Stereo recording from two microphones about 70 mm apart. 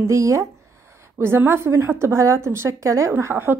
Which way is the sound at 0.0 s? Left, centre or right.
Right.